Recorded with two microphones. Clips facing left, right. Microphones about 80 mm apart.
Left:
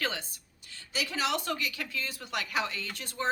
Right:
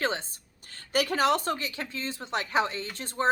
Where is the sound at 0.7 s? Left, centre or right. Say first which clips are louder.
Right 8 dB; right.